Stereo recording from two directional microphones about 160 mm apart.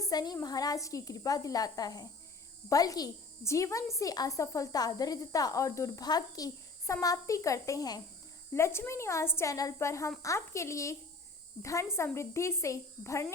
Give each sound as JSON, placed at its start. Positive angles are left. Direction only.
{"t": 0.0, "sound": "a woman's voice", "side_deg": 25}